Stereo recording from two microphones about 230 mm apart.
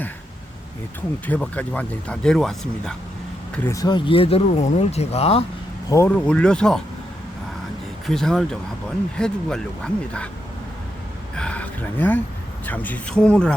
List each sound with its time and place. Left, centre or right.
1.3 s speech: centre; by 5.5 s left
5.9 s speech: centre
8.0 s speech: centre
11.3 s speech: centre